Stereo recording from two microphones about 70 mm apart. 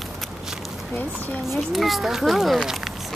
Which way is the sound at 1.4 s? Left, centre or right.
Centre.